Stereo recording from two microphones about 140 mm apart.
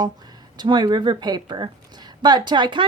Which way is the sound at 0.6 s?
30° right (ahead or behind).